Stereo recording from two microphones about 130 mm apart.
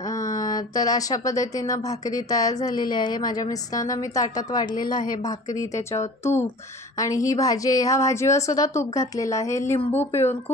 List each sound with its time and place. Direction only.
0.1 s speech: 25° left (ahead or behind)